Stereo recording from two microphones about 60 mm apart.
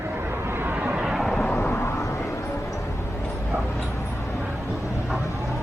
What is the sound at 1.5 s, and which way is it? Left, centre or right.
Vehicle, left.